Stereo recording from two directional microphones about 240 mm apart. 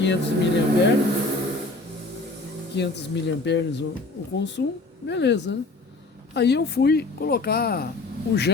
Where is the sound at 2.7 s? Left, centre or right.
Left.